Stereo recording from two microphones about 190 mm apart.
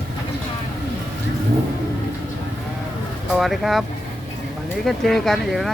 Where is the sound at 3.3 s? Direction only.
Centre (ahead or behind).